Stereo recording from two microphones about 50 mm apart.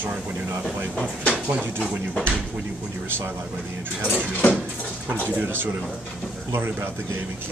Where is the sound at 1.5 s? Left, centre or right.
Right.